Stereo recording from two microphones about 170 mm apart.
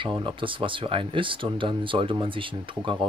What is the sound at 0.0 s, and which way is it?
Speech, 30° right (ahead or behind).